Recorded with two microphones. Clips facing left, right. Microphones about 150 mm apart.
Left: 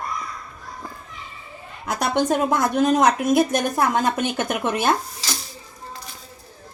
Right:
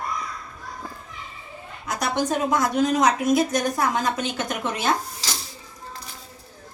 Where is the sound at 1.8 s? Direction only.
60° left (ahead or behind).